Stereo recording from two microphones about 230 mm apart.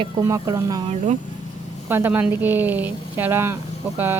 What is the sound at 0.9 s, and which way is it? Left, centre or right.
Speech, right.